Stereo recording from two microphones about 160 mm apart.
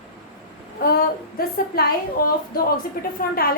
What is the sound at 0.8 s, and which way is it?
A woman's voice, 70° left (ahead or behind).